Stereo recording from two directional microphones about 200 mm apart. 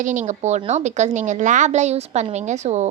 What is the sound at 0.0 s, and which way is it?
A woman's voice, 40° right (ahead or behind).